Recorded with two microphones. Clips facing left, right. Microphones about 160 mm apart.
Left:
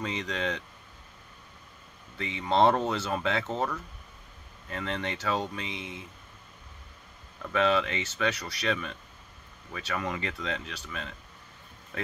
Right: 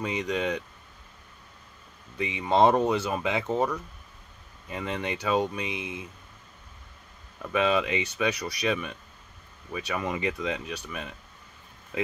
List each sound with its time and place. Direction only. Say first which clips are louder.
0.0 s speech: right 4 dB; 15° right (ahead or behind)
2.1 s speech: right 2 dB; 15° right (ahead or behind)
7.5 s speech: right 1 dB; 15° right (ahead or behind)